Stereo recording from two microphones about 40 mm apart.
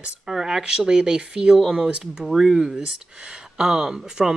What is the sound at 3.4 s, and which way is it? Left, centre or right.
Speech, centre.